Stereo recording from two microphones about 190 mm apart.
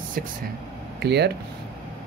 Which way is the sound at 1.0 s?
60° right (ahead or behind).